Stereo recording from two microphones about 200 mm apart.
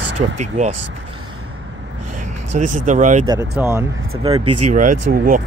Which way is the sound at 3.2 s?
20° right (ahead or behind).